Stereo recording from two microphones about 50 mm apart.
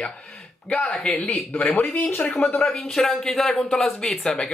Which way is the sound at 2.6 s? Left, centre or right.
Centre.